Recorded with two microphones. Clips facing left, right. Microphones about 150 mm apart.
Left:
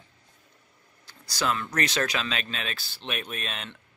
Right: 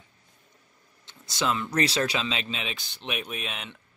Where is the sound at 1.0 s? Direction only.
25° right (ahead or behind).